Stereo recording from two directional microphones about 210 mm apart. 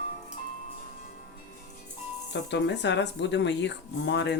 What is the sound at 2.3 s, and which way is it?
Speech, 55° left (ahead or behind).